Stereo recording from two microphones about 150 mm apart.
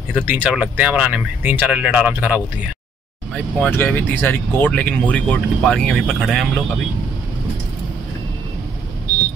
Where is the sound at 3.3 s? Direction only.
10° left (ahead or behind).